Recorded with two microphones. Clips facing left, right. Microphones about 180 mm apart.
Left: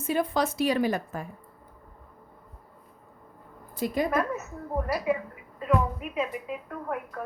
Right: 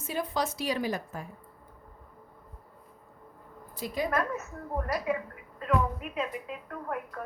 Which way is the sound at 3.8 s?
55° left (ahead or behind).